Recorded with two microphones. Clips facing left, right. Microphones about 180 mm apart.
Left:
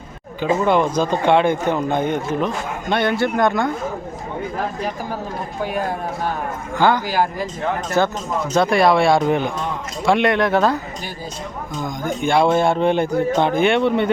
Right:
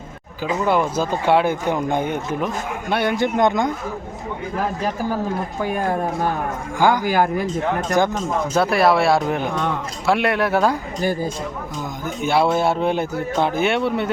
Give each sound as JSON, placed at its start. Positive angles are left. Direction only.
{"t": 0.6, "sound": "speech", "side_deg": -5}
{"t": 6.7, "sound": "speech", "side_deg": -10}
{"t": 7.0, "sound": "speech", "side_deg": -55}
{"t": 8.0, "sound": "speech", "side_deg": -15}
{"t": 12.0, "sound": "speech", "side_deg": -5}